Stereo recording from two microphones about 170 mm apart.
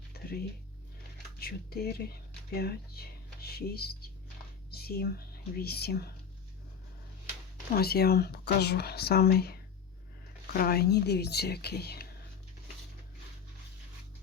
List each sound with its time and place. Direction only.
0.1 s a sound: 65° left (ahead or behind)
1.4 s speech: 65° left (ahead or behind)
7.8 s speech: 65° left (ahead or behind)